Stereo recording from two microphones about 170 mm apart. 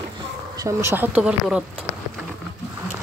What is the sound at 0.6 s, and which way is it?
Speech, 15° right (ahead or behind).